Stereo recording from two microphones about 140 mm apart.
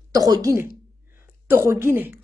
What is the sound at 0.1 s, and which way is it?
A woman's voice, 25° right (ahead or behind).